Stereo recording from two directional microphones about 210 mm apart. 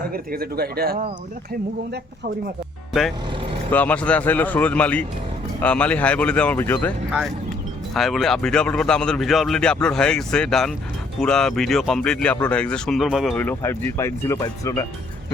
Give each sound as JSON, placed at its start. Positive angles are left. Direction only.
{"t": 0.1, "sound": "speech", "side_deg": -45}
{"t": 3.7, "sound": "speech", "side_deg": 5}